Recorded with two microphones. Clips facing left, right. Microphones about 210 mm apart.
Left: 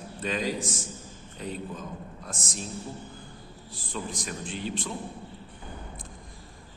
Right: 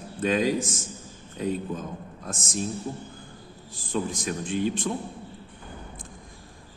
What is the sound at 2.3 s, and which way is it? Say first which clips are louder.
Speech: right 7 dB; 45° right (ahead or behind).